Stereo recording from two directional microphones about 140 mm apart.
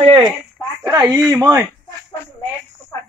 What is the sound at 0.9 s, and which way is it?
Speech, 25° right (ahead or behind).